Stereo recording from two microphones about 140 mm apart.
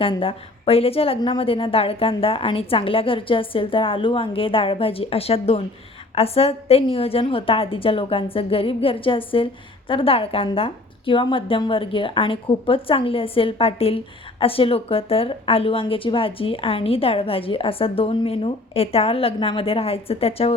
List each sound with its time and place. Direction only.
0.0 s a woman's voice: 40° left (ahead or behind)